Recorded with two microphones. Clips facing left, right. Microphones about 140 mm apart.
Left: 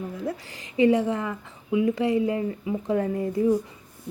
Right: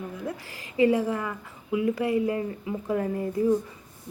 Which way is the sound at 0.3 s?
25° left (ahead or behind).